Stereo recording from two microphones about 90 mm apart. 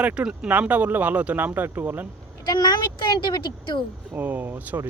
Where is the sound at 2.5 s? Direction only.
50° left (ahead or behind).